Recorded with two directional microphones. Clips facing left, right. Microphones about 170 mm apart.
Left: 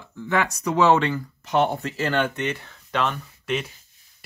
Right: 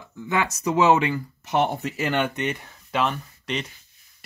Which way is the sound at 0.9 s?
10° right (ahead or behind).